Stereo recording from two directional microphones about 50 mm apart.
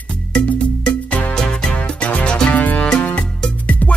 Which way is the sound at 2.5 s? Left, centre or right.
Left.